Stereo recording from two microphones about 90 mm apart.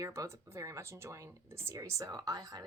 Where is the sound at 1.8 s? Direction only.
35° right (ahead or behind).